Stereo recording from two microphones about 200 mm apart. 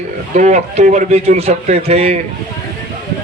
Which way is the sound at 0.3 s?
35° right (ahead or behind).